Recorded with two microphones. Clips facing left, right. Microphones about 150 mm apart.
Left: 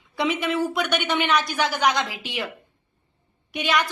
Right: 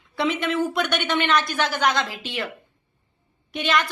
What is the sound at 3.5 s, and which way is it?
Speech, 10° left (ahead or behind).